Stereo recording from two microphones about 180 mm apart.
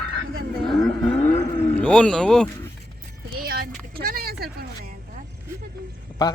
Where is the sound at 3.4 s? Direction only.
60° right (ahead or behind).